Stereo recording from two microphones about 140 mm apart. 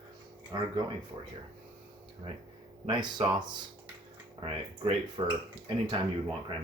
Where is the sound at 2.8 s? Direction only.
35° right (ahead or behind).